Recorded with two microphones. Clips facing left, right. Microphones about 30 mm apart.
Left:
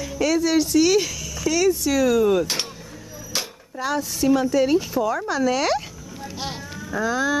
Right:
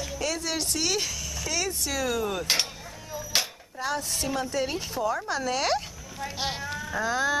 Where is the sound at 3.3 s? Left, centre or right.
Right.